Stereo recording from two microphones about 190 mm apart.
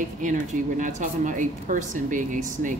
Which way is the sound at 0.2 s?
40° right (ahead or behind).